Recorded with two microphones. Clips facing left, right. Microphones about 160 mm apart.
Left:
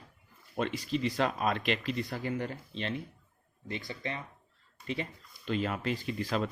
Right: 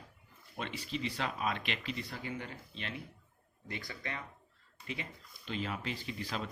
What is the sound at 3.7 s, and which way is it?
Speech, 25° left (ahead or behind).